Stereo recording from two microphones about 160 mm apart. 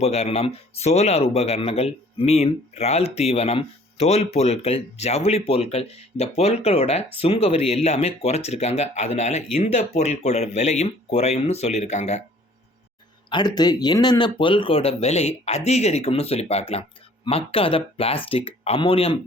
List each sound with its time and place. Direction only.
0.0 s speech: 40° left (ahead or behind)
13.3 s speech: 25° left (ahead or behind)